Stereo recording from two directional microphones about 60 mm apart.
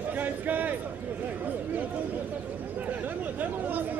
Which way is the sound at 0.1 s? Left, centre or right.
Right.